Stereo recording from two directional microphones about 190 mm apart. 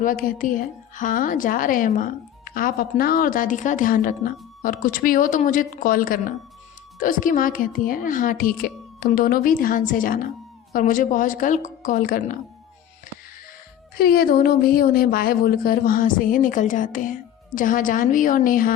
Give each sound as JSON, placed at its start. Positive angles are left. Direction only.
{"t": 0.0, "sound": "a woman's voice", "side_deg": 45}
{"t": 13.9, "sound": "a woman's voice", "side_deg": 50}